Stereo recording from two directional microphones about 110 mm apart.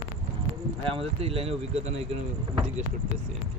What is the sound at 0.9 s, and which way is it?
Speech, 65° right (ahead or behind).